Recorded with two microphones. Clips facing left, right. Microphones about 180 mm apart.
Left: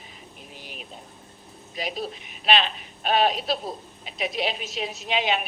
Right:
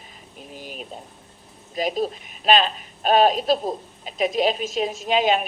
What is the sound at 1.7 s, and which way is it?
Speech, 45° right (ahead or behind).